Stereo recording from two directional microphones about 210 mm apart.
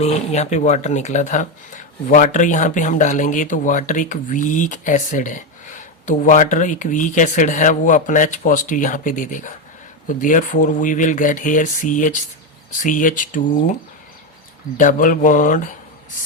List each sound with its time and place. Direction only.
0.0 s speech: 30° left (ahead or behind)
14.8 s speech: 40° left (ahead or behind)